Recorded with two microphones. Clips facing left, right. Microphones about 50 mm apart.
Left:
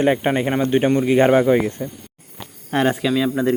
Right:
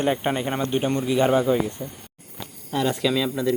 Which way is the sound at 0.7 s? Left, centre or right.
Left.